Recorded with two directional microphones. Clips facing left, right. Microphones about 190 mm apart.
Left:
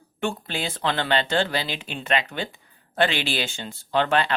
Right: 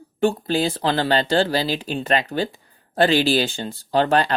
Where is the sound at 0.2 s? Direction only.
35° right (ahead or behind).